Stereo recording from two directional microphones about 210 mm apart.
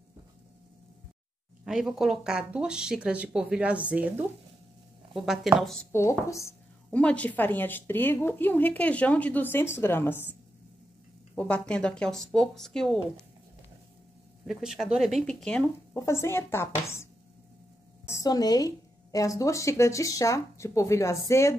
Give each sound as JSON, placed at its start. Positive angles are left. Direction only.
{"t": 1.6, "sound": "speech", "side_deg": 0}
{"t": 5.9, "sound": "speech", "side_deg": 15}
{"t": 11.3, "sound": "speech", "side_deg": 5}
{"t": 14.4, "sound": "speech", "side_deg": 0}